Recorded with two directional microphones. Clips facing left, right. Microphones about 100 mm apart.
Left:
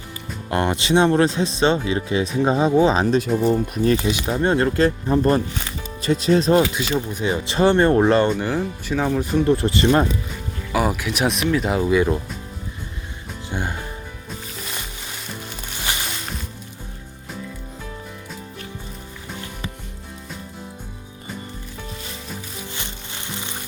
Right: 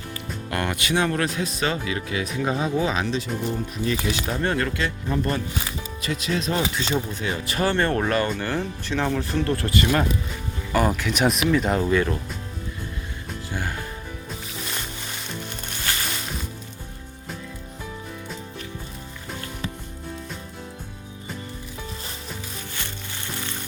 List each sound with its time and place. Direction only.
0.5 s speech: 25° left (ahead or behind); by 3.9 s 40° left (ahead or behind)
3.9 s speech: 20° left (ahead or behind)
7.1 s speech: 20° left (ahead or behind)
8.4 s speech: 10° left (ahead or behind); by 10.1 s 25° left (ahead or behind)
10.7 s speech: 5° left (ahead or behind)
13.5 s speech: 20° left (ahead or behind)